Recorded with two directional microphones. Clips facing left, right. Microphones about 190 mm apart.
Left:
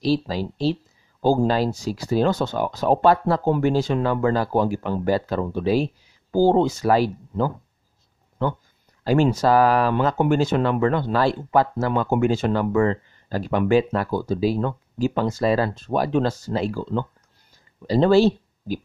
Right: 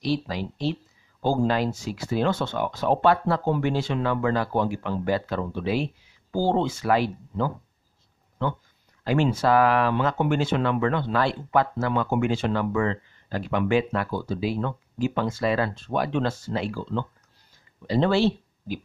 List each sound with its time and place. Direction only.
0.0 s speech: 35° left (ahead or behind)
9.0 s speech: 40° left (ahead or behind)